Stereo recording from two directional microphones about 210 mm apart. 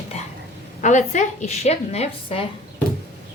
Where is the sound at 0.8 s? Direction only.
35° left (ahead or behind).